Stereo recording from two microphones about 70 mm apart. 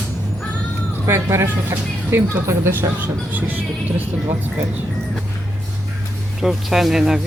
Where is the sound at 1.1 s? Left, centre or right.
Right.